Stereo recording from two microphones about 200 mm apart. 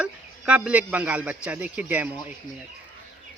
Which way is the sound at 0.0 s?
5° right (ahead or behind).